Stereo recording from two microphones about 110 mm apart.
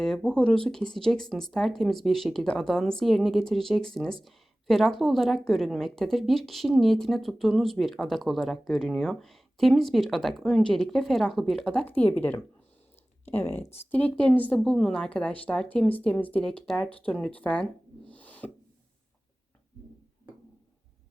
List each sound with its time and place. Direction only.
0.0 s a woman's voice: 5° left (ahead or behind)
18.1 s music: 15° left (ahead or behind)